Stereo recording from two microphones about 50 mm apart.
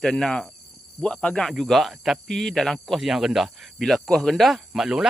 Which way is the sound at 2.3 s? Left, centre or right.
Centre.